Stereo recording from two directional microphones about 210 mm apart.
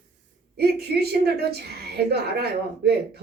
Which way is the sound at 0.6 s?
50° right (ahead or behind).